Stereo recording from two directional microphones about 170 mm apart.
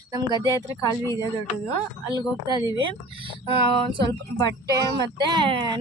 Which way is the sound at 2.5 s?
25° right (ahead or behind).